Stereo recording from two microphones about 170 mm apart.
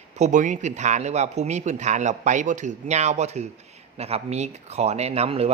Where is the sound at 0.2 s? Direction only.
45° right (ahead or behind).